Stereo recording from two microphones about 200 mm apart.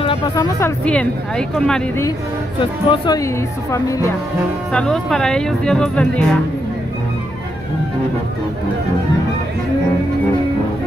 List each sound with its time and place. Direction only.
0.0 s music: 25° left (ahead or behind)
0.5 s speech: 10° left (ahead or behind)
2.6 s speech: 20° left (ahead or behind)
4.7 s speech: 5° left (ahead or behind)